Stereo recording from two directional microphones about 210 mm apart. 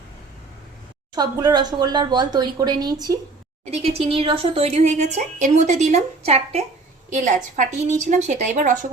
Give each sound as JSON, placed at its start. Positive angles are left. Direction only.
{"t": 1.1, "sound": "a woman's voice", "side_deg": -20}